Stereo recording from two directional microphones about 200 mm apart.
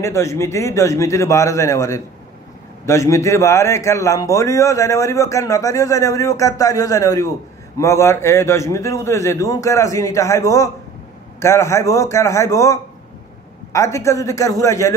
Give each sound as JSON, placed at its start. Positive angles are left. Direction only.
{"t": 0.0, "sound": "a man's voice", "side_deg": 15}